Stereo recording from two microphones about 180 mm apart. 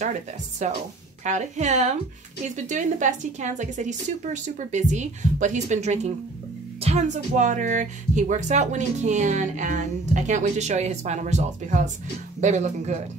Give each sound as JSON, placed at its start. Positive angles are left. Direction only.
{"t": 0.6, "sound": "a woman's voice", "side_deg": -40}